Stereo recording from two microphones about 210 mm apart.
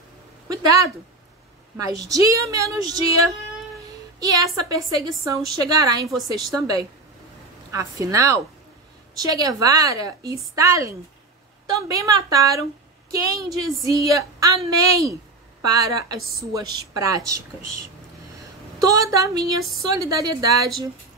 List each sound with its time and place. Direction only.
0.5 s a woman's voice: 15° right (ahead or behind)
2.0 s a woman's voice: 15° right (ahead or behind)
4.2 s a woman's voice: 15° right (ahead or behind)
18.8 s a woman's voice: 15° right (ahead or behind)